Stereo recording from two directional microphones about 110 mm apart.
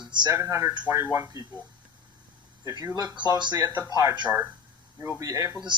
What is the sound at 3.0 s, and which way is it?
Speech, 40° right (ahead or behind).